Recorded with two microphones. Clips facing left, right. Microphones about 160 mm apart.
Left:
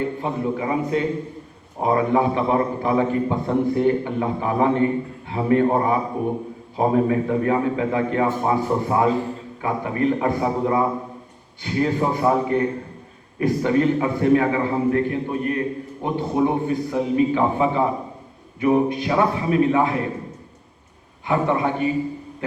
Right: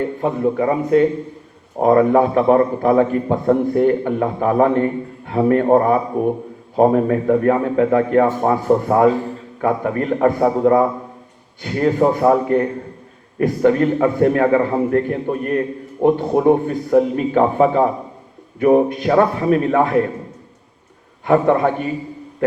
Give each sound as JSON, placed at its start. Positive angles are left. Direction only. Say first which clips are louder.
{"t": 0.2, "sound": "a man's voice", "louder": "right 6 dB", "side_deg": -45}
{"t": 21.2, "sound": "a man's voice", "louder": "right 6 dB", "side_deg": -45}